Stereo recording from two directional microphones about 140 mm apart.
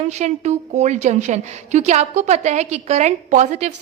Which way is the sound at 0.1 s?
55° right (ahead or behind).